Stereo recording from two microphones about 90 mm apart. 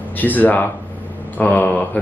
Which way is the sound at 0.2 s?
20° left (ahead or behind).